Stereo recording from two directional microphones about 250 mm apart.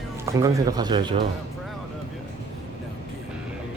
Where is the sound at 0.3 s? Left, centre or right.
Centre.